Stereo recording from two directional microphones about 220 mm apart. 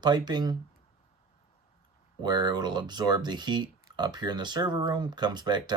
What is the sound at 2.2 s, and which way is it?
Speech, 20° right (ahead or behind).